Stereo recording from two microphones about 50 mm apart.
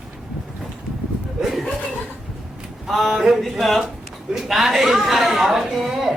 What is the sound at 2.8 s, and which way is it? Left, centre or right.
A woman's voice, centre.